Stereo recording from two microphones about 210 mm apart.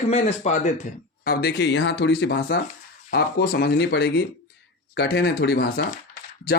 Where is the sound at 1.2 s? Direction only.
50° left (ahead or behind).